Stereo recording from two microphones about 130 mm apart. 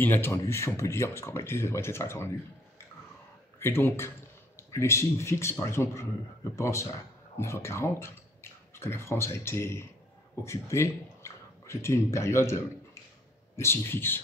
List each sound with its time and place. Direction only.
0.0 s speech: 15° left (ahead or behind)
3.5 s speech: 20° left (ahead or behind)
13.6 s speech: 20° left (ahead or behind)